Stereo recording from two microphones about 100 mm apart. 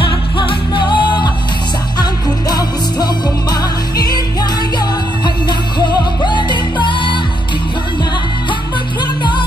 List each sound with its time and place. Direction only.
0.0 s music: 55° left (ahead or behind)
9.0 s music: 50° left (ahead or behind)